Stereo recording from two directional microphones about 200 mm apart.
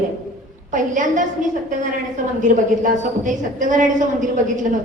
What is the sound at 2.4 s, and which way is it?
A woman's voice, 40° right (ahead or behind).